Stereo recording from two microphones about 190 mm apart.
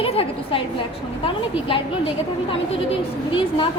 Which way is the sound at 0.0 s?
30° left (ahead or behind).